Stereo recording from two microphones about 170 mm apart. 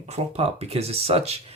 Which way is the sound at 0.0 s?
40° right (ahead or behind).